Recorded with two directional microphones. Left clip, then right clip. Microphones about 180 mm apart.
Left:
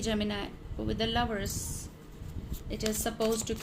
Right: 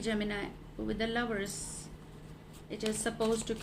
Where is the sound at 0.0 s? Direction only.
30° left (ahead or behind).